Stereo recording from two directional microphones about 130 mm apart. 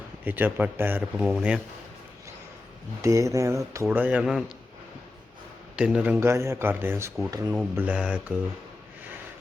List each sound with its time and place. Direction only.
0.3 s a man's voice: 15° right (ahead or behind)
3.0 s speech: 25° right (ahead or behind); by 4.5 s 5° right (ahead or behind)
5.7 s a man's voice: 10° right (ahead or behind); by 7.5 s 30° right (ahead or behind)
7.5 s a man's voice: 10° right (ahead or behind)